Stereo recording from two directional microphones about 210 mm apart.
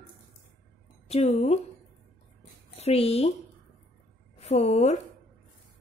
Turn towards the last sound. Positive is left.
turn(degrees=30)  # may be behind; listen again after turning